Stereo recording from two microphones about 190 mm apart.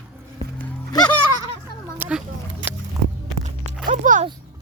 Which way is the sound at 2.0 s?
10° right (ahead or behind).